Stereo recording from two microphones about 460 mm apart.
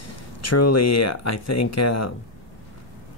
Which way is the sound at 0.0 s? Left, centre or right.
Left.